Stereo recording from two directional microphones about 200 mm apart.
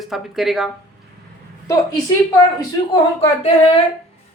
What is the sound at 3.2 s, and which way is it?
Speech, 30° left (ahead or behind).